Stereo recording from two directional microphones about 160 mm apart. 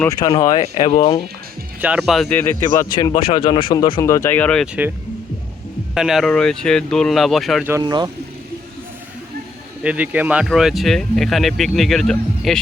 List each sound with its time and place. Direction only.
0.1 s speech: 25° left (ahead or behind)
0.6 s speech: 40° left (ahead or behind)
1.8 s speech: 5° right (ahead or behind)
3.0 s speech: 35° left (ahead or behind)
4.0 s speech: 15° left (ahead or behind)
4.6 s speech: 5° right (ahead or behind)
5.9 s speech: 5° right (ahead or behind)
7.8 s speech: 25° right (ahead or behind)
9.8 s speech: 10° right (ahead or behind)